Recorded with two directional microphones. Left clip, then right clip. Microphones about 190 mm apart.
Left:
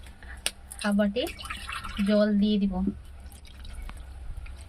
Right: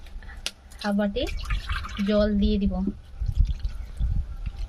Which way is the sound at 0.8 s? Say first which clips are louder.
Even; 30° right (ahead or behind).